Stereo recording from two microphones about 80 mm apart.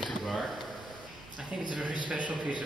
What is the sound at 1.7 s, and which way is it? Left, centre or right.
Speech, centre.